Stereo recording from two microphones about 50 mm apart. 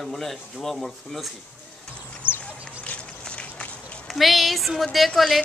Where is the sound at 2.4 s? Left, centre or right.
Left.